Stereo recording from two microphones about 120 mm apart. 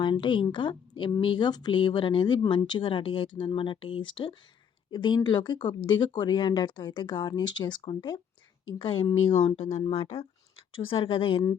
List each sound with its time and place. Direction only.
0.0 s a woman's voice: 40° left (ahead or behind)
9.6 s speech: 55° left (ahead or behind)